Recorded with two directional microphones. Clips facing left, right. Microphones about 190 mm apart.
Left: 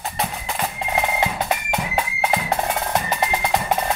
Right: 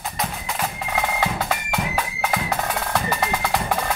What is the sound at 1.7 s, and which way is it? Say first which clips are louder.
Music: left 1 dB; 25° left (ahead or behind).